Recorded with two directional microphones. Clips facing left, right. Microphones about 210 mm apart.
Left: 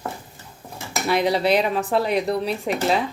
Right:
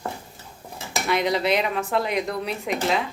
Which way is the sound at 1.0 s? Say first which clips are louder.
Left 3 dB; 35° left (ahead or behind).